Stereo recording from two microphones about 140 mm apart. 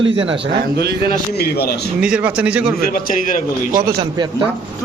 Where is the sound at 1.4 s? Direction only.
90° left.